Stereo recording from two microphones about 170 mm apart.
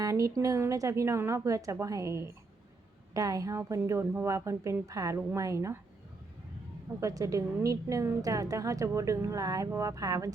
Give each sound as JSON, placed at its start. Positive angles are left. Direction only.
{"t": 0.0, "sound": "a woman's voice", "side_deg": -20}
{"t": 7.0, "sound": "a woman's voice", "side_deg": -20}